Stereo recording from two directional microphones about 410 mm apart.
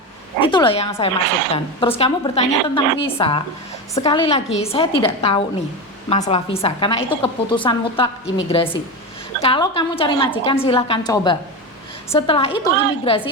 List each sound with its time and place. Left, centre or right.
0.3 s a woman's voice: centre